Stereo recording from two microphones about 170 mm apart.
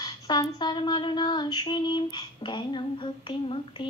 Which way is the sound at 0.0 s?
25° left (ahead or behind).